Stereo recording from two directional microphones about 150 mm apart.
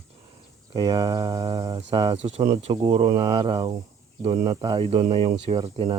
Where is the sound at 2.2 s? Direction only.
45° right (ahead or behind).